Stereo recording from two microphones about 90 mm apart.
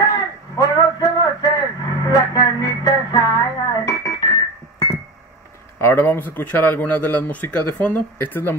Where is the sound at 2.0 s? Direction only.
45° left (ahead or behind).